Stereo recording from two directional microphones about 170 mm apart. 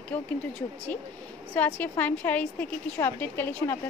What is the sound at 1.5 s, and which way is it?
A woman's voice, 10° left (ahead or behind).